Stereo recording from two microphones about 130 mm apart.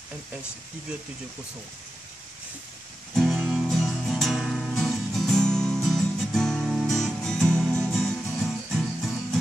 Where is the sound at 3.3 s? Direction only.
5° right (ahead or behind).